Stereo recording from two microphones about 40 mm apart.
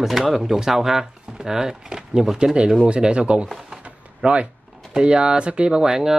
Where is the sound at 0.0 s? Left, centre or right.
Centre.